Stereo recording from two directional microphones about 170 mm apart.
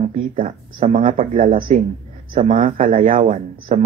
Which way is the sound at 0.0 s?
45° right (ahead or behind).